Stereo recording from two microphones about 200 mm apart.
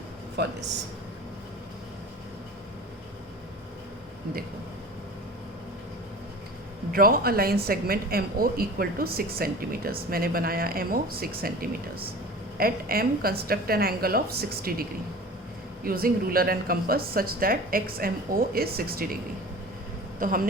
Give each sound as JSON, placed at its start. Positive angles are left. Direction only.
{"t": 0.4, "sound": "speech", "side_deg": -55}
{"t": 6.9, "sound": "speech", "side_deg": -45}
{"t": 20.1, "sound": "speech", "side_deg": -45}